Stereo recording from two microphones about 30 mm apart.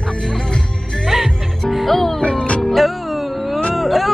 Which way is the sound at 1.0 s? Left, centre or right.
Centre.